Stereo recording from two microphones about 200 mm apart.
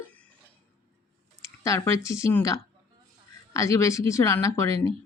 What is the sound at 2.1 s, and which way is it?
Speech, 15° left (ahead or behind).